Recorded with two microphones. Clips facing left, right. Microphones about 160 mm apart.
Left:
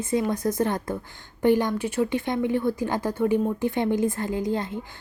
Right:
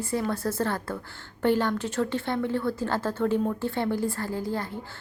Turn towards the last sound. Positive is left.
turn(degrees=20)  # may be behind; listen again after turning